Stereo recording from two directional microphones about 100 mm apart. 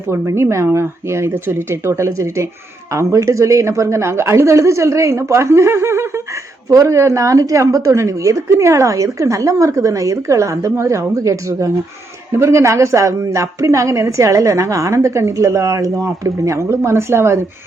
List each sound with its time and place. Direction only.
0.1 s a woman's voice: 25° right (ahead or behind)